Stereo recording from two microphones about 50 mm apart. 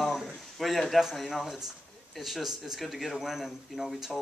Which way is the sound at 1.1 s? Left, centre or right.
Centre.